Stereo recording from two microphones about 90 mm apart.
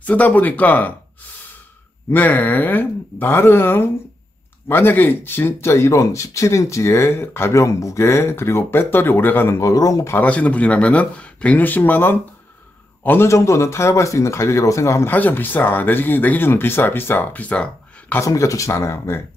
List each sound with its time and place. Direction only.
0.0 s speech: 15° left (ahead or behind)
2.0 s speech: 20° left (ahead or behind)
9.6 s speech: 40° left (ahead or behind)
10.1 s a man's voice: 15° left (ahead or behind)
13.3 s speech: 35° left (ahead or behind)
15.0 s speech: 20° left (ahead or behind)
18.2 s speech: 35° left (ahead or behind)